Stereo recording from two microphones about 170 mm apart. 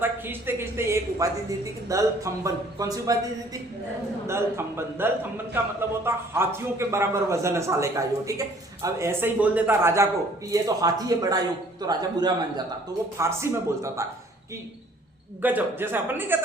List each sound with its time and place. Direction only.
0.0 s a woman's voice: 10° right (ahead or behind)
15.4 s a man's voice: 10° right (ahead or behind)